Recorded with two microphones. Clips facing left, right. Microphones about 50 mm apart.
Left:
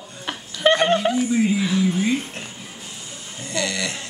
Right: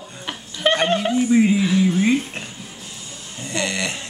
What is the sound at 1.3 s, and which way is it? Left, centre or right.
Speech, right.